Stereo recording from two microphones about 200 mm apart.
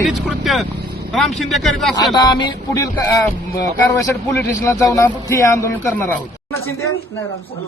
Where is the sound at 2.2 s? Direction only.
20° left (ahead or behind).